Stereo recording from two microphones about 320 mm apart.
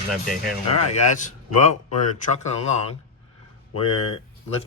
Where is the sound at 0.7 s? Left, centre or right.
Left.